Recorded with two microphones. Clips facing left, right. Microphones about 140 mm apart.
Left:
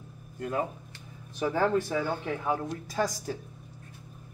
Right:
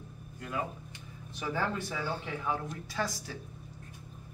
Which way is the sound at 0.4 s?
45° left (ahead or behind).